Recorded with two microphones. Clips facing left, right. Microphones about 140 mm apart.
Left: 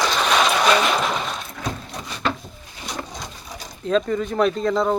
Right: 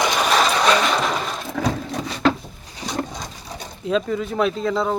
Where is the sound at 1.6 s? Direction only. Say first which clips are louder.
Right 8 dB; 90° right.